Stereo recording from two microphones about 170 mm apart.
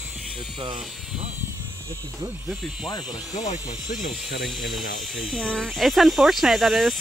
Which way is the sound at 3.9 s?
50° left (ahead or behind).